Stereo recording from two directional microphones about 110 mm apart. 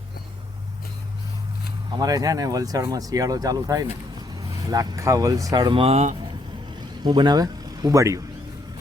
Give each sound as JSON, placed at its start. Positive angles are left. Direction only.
{"t": 2.0, "sound": "speech", "side_deg": -35}
{"t": 5.7, "sound": "speech", "side_deg": -65}
{"t": 7.0, "sound": "speech", "side_deg": -40}